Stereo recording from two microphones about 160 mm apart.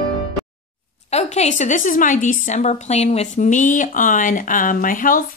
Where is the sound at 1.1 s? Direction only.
45° left (ahead or behind).